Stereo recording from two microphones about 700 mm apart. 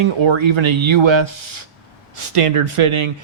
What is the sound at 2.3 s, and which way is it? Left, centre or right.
Speech, right.